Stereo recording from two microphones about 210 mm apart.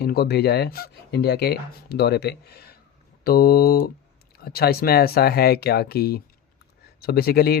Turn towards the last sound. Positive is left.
turn(degrees=45)  # may be behind; listen again after turning